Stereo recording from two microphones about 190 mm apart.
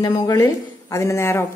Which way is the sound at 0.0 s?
20° left (ahead or behind).